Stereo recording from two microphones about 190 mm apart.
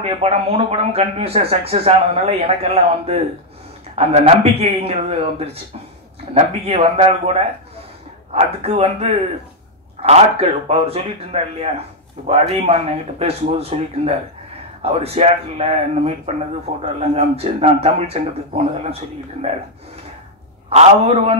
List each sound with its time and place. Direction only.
0.0 s speech: 30° right (ahead or behind)
20.7 s speech: 30° right (ahead or behind)